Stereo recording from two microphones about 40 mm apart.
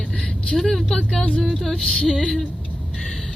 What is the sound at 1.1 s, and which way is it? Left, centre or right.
Speech, left.